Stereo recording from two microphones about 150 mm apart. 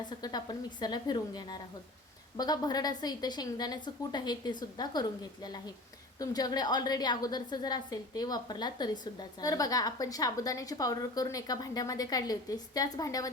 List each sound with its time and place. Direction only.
0.2 s a woman's voice: 25° left (ahead or behind)